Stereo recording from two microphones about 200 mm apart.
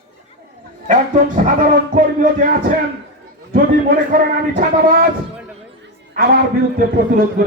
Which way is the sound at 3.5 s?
45° right (ahead or behind).